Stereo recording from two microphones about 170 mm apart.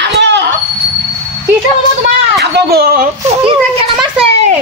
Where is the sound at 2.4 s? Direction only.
70° right (ahead or behind).